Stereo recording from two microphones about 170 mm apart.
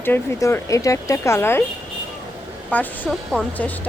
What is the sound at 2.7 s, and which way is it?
Speech, 10° left (ahead or behind).